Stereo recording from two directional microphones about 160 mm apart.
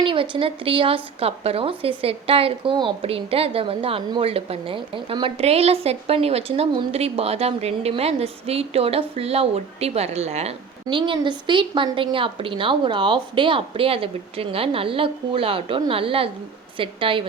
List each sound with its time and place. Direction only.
0.0 s speech: 35° right (ahead or behind)
10.8 s speech: 30° right (ahead or behind)